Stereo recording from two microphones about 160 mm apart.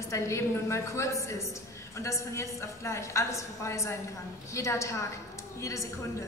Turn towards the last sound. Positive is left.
turn(degrees=20)  # may be behind; listen again after turning